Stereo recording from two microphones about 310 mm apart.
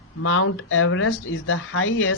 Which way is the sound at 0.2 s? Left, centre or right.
Left.